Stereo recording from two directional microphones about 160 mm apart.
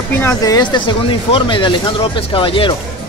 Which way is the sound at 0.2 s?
20° left (ahead or behind).